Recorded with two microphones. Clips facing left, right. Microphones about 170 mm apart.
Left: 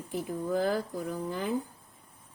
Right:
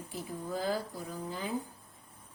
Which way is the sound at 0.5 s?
55° left (ahead or behind).